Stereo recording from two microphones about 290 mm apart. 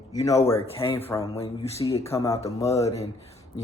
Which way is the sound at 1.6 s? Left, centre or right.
Left.